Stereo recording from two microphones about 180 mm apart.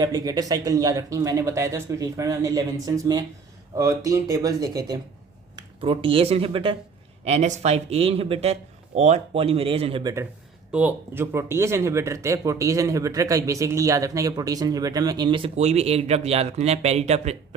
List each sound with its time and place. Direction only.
0.0 s speech: 20° right (ahead or behind)
10.0 s speech: 20° right (ahead or behind)
10.7 s speech: 10° right (ahead or behind); by 17.3 s 35° right (ahead or behind)